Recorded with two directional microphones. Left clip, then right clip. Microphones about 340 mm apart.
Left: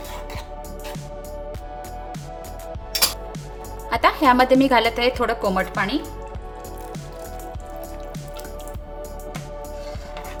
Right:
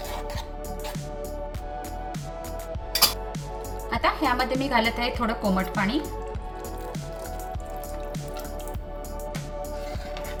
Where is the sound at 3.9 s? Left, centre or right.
Left.